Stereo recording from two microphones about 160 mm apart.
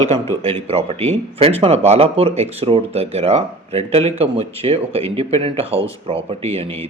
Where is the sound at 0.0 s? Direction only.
40° right (ahead or behind).